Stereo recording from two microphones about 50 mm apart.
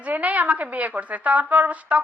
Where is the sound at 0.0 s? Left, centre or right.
Right.